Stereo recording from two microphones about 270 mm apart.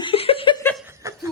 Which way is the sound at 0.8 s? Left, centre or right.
Centre.